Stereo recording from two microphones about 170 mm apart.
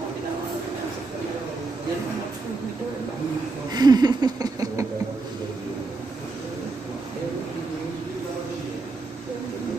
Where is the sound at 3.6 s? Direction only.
25° right (ahead or behind).